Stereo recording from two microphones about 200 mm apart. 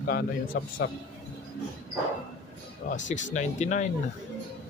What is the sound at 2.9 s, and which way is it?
Speech, 40° left (ahead or behind).